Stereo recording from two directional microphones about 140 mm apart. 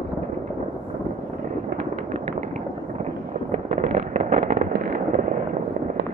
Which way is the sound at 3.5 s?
50° right (ahead or behind).